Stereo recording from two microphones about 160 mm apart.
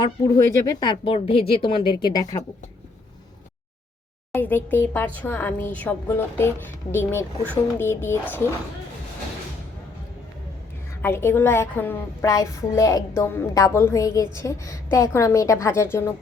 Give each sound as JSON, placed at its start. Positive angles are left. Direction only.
{"t": 0.0, "sound": "a woman's voice", "side_deg": 25}
{"t": 4.3, "sound": "a woman's voice", "side_deg": 10}
{"t": 11.0, "sound": "a woman's voice", "side_deg": 15}